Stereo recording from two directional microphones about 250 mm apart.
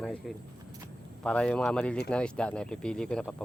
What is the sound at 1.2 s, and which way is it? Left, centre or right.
Speech, centre.